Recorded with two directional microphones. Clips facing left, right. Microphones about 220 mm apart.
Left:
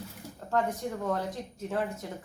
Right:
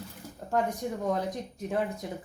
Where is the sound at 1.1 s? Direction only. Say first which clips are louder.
Right 3 dB; 15° right (ahead or behind).